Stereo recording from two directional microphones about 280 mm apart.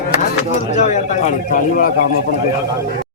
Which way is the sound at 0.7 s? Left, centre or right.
Left.